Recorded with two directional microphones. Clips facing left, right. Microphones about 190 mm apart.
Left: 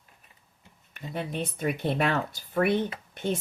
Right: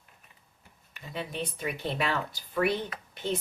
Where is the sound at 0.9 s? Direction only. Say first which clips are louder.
Left 3 dB; 50° left (ahead or behind).